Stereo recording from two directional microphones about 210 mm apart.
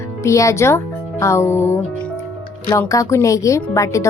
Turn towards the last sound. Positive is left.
turn(degrees=15)  # may be behind; listen again after turning